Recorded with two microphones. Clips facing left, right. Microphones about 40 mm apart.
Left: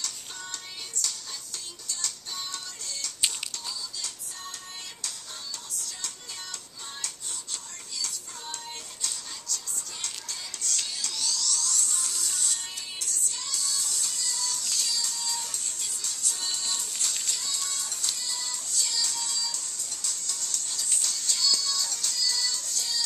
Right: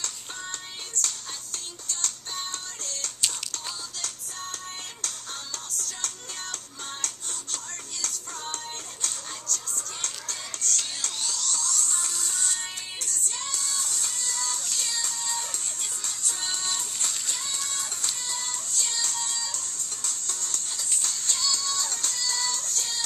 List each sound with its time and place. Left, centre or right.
1.0 s music: right